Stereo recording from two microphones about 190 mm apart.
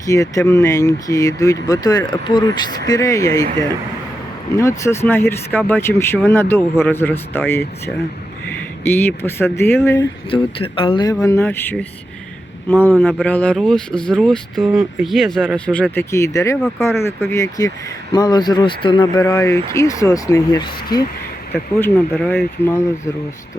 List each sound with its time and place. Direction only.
0.0 s speech: 15° left (ahead or behind)
4.8 s speech: 15° left (ahead or behind)
10.0 s speech: 25° left (ahead or behind); by 11.9 s 10° left (ahead or behind)
13.0 s speech: 5° left (ahead or behind)
16.6 s speech: 5° left (ahead or behind)
16.8 s speech: 15° left (ahead or behind)
21.5 s speech: 10° left (ahead or behind)